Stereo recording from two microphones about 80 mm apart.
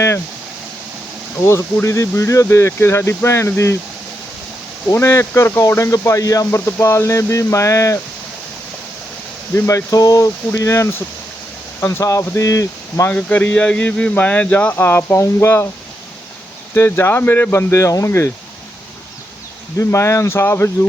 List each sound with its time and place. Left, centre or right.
1.5 s speech: left
4.9 s speech: left
9.6 s speech: left
13.1 s speech: centre
16.7 s speech: left
19.8 s speech: left